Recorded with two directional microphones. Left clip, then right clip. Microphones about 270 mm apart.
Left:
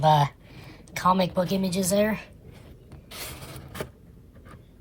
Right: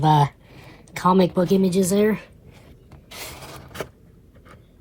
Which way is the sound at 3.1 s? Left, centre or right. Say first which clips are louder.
Right 3 dB; centre.